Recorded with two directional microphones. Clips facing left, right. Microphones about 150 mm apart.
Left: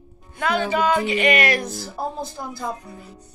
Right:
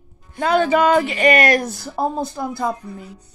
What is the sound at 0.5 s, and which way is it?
A man's voice, 50° right (ahead or behind).